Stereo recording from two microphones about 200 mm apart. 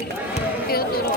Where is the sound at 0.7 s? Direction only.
50° left (ahead or behind).